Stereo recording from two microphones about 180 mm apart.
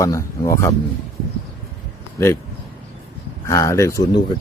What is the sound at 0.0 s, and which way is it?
Speech, 15° left (ahead or behind).